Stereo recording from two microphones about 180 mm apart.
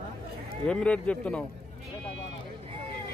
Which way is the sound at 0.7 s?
5° left (ahead or behind).